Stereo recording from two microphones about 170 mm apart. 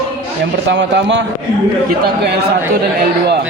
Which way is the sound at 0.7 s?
90° right.